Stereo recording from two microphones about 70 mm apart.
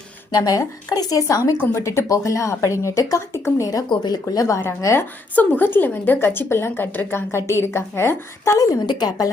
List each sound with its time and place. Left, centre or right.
0.3 s speech: left
3.8 s speech: left
4.9 s speech: left
8.5 s speech: left